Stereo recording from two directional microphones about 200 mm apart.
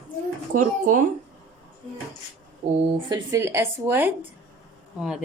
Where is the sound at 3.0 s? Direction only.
15° right (ahead or behind).